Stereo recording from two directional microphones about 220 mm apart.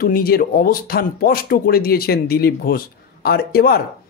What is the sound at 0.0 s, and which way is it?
Speech, 40° left (ahead or behind).